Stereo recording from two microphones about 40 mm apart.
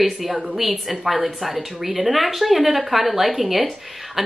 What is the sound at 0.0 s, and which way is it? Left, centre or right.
Speech, centre.